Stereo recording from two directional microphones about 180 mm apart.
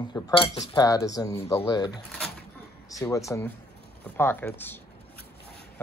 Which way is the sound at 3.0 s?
15° left (ahead or behind).